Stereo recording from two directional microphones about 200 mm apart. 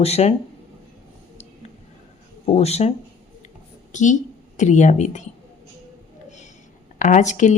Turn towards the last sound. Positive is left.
turn(degrees=35)  # may be behind; listen again after turning